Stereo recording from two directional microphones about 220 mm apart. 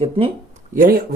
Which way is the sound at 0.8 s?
40° right (ahead or behind).